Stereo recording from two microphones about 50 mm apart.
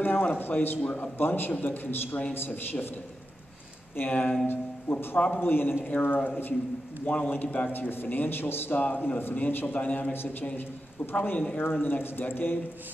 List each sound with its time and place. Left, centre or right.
0.0 s a man's voice: left
3.9 s a man's voice: left
4.9 s a man's voice: left
8.7 s a man's voice: left
9.8 s a man's voice: left
11.1 s a man's voice: left